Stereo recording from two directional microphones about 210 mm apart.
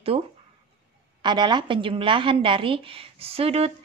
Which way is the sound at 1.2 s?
20° right (ahead or behind).